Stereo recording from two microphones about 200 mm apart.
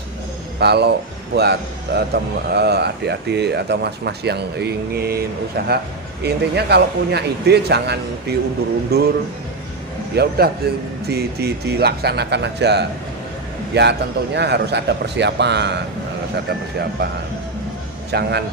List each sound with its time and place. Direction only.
0.6 s a man's voice: 55° right (ahead or behind)
10.2 s a man's voice: 50° right (ahead or behind)
18.1 s a man's voice: 55° right (ahead or behind)